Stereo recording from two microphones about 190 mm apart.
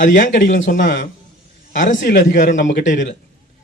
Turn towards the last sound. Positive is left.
turn(degrees=45)  # may be behind; listen again after turning